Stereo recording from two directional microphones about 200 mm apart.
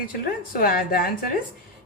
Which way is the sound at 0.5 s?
45° left (ahead or behind).